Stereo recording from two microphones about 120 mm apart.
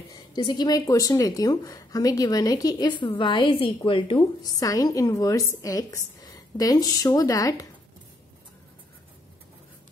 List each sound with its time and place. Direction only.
0.1 s speech: 40° left (ahead or behind)